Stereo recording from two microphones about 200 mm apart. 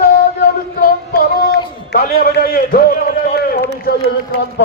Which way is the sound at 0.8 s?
55° left (ahead or behind).